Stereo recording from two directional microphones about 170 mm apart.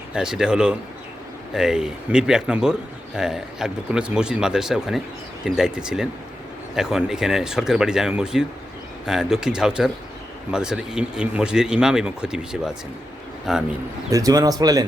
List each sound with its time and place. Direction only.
0.1 s speech: 5° right (ahead or behind)
14.1 s speech: 20° right (ahead or behind)